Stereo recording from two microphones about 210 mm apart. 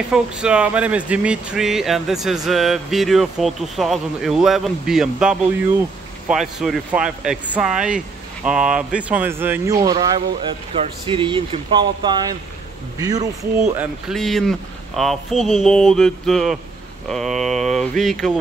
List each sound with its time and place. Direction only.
0.1 s speech: 5° right (ahead or behind)
13.7 s speech: centre (ahead or behind)